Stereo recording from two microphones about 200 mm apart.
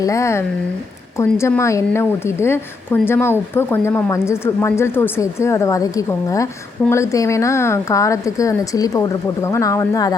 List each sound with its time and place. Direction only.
0.0 s a woman's voice: 15° left (ahead or behind)